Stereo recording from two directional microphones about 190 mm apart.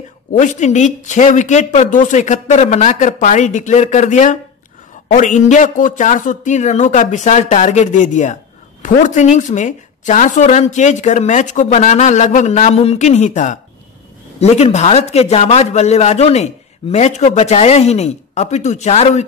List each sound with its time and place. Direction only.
0.3 s speech: 40° left (ahead or behind)